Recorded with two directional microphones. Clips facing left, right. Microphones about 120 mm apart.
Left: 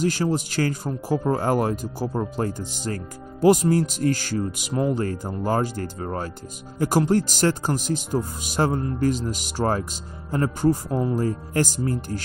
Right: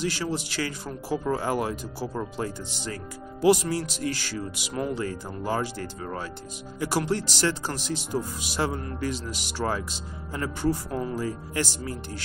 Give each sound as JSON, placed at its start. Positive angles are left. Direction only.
{"t": 0.0, "sound": "speech", "side_deg": 45}